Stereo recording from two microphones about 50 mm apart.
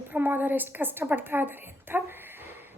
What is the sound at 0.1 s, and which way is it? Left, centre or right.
A woman's voice, right.